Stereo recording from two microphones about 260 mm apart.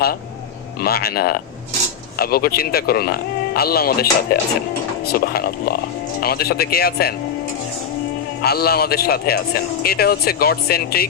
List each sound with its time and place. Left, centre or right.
0.8 s speech: left
8.4 s speech: left